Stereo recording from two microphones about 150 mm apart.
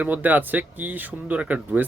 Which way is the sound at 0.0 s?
10° right (ahead or behind).